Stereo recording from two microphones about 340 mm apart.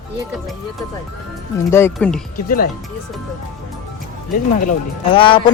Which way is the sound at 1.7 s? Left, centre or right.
Centre.